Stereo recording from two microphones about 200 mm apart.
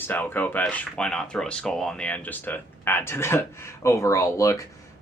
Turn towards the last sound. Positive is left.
turn(degrees=15)  # may be behind; listen again after turning